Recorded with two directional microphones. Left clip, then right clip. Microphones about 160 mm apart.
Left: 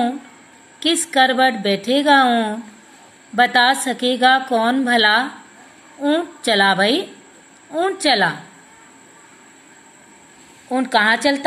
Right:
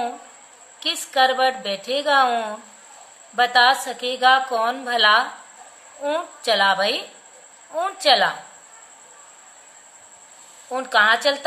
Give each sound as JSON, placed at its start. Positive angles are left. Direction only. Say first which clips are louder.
{"t": 0.7, "sound": "a woman's voice", "louder": "left 4 dB", "side_deg": 10}
{"t": 10.7, "sound": "a woman's voice", "louder": "left 1 dB", "side_deg": 10}